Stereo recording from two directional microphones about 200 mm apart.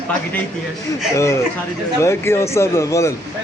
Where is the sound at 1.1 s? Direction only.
15° left (ahead or behind).